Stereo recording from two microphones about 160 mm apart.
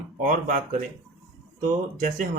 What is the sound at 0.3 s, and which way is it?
Speech, 55° right (ahead or behind).